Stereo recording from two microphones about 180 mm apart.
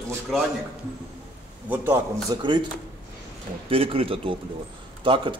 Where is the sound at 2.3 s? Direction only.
25° right (ahead or behind).